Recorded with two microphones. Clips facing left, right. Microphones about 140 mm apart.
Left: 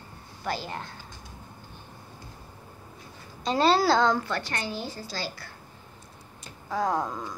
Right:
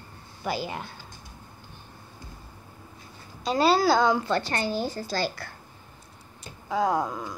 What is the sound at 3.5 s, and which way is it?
Speech, 5° right (ahead or behind).